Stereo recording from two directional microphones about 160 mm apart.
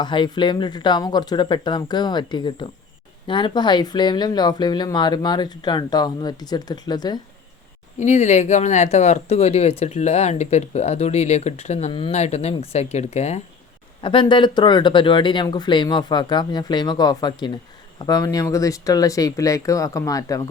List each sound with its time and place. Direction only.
0.0 s speech: 30° left (ahead or behind)
7.9 s speech: 45° left (ahead or behind)
14.0 s speech: 30° left (ahead or behind)